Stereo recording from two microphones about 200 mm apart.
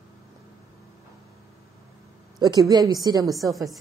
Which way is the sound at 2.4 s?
20° right (ahead or behind).